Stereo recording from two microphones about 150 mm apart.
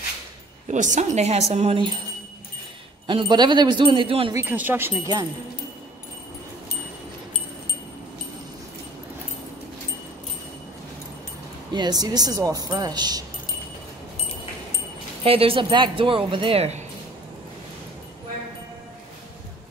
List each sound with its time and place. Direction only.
0.7 s a woman's voice: 55° right (ahead or behind); by 2.0 s 35° right (ahead or behind)
3.1 s speech: 30° right (ahead or behind)
4.5 s speech: 10° right (ahead or behind)
11.7 s speech: 30° right (ahead or behind)
15.2 s speech: 40° right (ahead or behind)